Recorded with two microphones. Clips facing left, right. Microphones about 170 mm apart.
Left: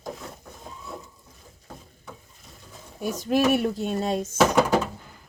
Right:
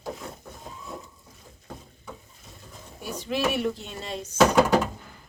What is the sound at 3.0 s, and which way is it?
Speech, 45° left (ahead or behind).